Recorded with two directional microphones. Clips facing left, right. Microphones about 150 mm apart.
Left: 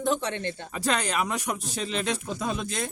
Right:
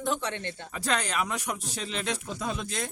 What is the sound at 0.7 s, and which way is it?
Speech, 10° left (ahead or behind).